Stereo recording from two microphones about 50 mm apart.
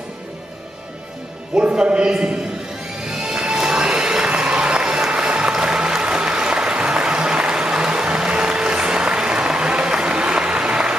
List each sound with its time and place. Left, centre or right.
1.5 s a man's voice: right
3.1 s music: centre